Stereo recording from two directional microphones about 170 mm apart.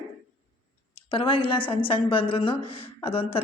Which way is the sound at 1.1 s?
30° left (ahead or behind).